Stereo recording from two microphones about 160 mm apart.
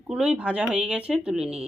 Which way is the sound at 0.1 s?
5° right (ahead or behind).